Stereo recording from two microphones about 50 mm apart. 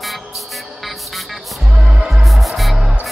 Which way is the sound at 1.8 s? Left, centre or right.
Centre.